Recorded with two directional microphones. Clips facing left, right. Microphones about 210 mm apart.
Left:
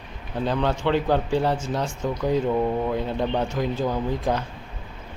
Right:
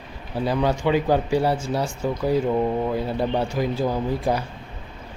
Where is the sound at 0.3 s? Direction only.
10° right (ahead or behind).